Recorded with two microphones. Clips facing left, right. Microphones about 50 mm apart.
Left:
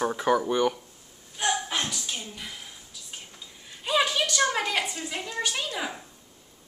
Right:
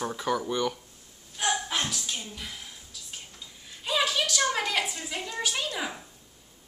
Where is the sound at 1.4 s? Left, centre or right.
Centre.